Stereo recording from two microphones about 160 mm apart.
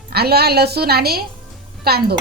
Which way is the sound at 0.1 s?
80° right.